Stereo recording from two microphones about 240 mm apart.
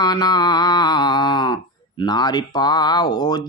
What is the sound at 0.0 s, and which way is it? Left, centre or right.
Speech, centre.